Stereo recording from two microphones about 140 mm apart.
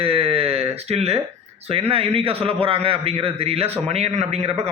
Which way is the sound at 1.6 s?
45° right (ahead or behind).